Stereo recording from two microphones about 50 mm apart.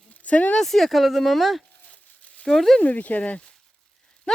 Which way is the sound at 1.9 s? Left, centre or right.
Left.